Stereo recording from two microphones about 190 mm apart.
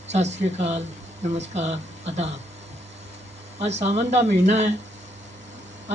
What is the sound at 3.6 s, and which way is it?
Speech, 35° right (ahead or behind).